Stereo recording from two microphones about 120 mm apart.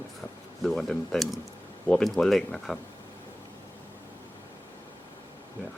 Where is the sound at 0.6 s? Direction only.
Centre (ahead or behind).